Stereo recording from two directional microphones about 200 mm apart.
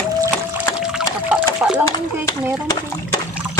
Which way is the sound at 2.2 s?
20° left (ahead or behind).